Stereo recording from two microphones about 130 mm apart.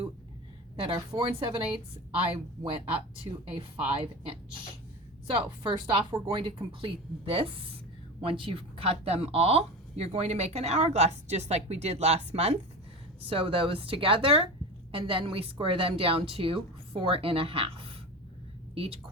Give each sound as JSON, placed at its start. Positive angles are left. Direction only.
{"t": 0.9, "sound": "a woman's voice", "side_deg": -35}